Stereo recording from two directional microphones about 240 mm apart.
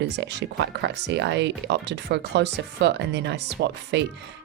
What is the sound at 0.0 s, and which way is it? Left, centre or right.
Speech, right.